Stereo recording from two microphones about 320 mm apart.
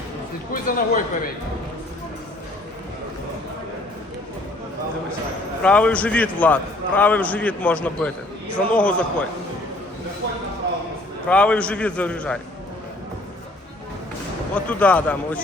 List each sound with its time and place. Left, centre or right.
0.5 s speech: left
5.6 s a man's voice: centre
11.3 s a man's voice: centre
14.5 s a man's voice: centre